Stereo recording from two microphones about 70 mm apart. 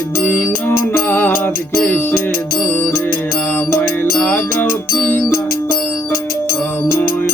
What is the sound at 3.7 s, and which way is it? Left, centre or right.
Music, left.